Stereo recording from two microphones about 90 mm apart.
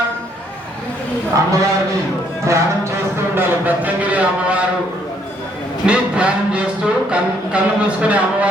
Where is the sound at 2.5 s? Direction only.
35° right (ahead or behind).